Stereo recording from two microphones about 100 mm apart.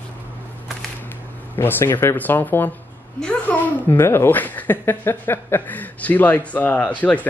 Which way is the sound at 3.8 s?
25° left (ahead or behind).